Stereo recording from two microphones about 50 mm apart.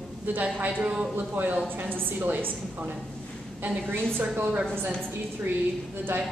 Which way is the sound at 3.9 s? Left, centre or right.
Right.